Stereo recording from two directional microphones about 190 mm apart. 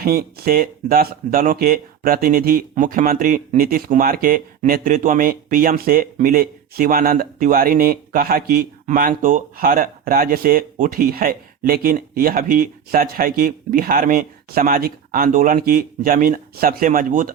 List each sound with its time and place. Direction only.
0.0 s speech: 50° right (ahead or behind)